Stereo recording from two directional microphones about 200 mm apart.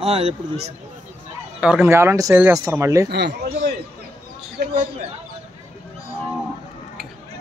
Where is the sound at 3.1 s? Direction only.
55° right (ahead or behind).